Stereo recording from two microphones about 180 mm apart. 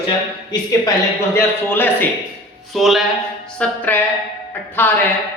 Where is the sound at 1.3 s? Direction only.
10° left (ahead or behind).